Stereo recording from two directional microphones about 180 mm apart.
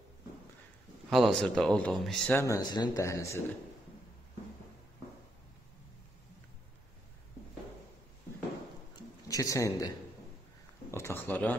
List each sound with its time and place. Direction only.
1.1 s speech: centre (ahead or behind)
2.4 s speech: 20° left (ahead or behind)
9.3 s speech: 20° left (ahead or behind)